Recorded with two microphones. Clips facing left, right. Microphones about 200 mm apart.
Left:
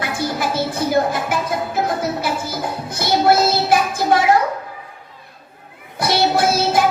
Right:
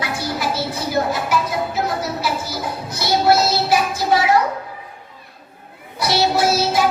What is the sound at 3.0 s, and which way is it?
Child singing, 50° left (ahead or behind).